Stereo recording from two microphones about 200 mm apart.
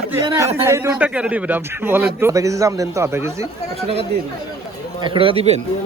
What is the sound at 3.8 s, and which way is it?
Speech, 30° right (ahead or behind).